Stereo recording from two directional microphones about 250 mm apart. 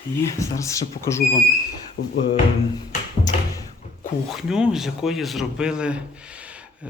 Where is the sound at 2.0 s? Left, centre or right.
Left.